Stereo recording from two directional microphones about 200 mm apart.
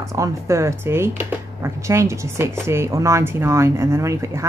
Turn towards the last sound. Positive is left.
turn(degrees=-15)  # may be behind; listen again after turning